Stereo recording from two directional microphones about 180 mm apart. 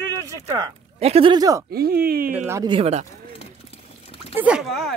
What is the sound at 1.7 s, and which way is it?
Speech, 60° right (ahead or behind).